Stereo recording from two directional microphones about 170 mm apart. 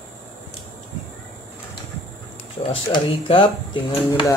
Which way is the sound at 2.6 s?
30° left (ahead or behind).